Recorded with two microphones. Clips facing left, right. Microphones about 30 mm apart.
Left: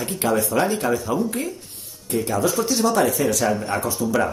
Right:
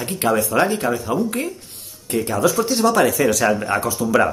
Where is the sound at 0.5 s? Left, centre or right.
Right.